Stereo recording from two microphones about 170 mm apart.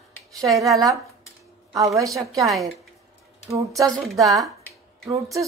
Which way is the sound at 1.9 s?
20° right (ahead or behind).